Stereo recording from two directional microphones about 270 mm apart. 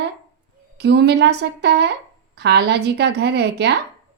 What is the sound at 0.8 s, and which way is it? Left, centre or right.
A woman's voice, right.